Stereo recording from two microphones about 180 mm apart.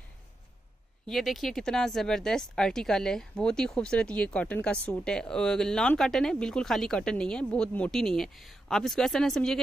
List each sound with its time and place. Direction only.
1.0 s speech: centre (ahead or behind)